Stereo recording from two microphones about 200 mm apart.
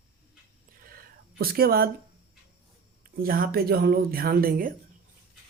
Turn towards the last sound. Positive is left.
turn(degrees=-45)  # may be behind; listen again after turning